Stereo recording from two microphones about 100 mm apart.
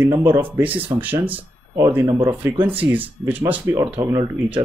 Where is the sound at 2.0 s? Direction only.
45° right (ahead or behind).